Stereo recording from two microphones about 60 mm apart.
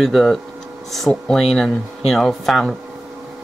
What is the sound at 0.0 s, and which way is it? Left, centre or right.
Speech, centre.